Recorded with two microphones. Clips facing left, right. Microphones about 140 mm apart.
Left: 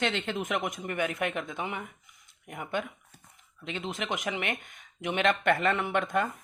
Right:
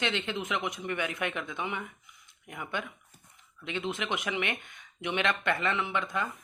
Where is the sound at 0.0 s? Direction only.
45° left (ahead or behind).